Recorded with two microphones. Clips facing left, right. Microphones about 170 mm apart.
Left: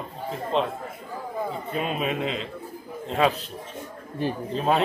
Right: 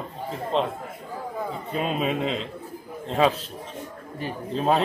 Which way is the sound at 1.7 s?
5° left (ahead or behind).